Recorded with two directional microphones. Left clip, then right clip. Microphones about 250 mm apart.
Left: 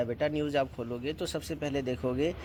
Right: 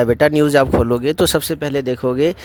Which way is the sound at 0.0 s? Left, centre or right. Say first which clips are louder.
Right 17 dB; right.